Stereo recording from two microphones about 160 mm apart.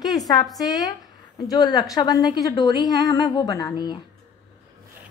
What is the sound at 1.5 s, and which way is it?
A woman's voice, 25° left (ahead or behind).